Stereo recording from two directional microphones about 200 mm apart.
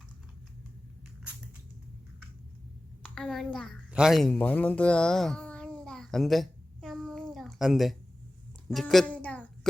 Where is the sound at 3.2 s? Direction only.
Centre (ahead or behind).